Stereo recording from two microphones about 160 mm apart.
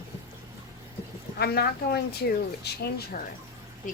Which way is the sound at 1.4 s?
80° left.